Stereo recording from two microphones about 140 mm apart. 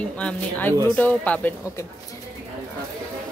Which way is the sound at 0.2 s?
10° left (ahead or behind).